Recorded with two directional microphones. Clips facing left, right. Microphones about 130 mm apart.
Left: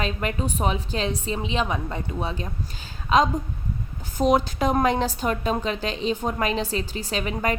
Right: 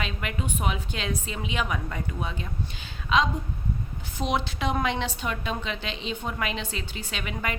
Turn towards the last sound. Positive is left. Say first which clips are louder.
# left 7 dB
turn(degrees=40)  # may be behind; listen again after turning